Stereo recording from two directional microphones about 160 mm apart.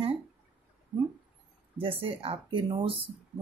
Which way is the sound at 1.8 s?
35° right (ahead or behind).